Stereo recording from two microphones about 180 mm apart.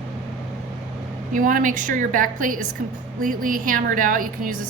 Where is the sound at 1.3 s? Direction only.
45° right (ahead or behind).